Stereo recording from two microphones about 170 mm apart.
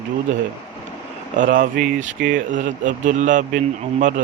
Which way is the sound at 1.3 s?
55° right (ahead or behind).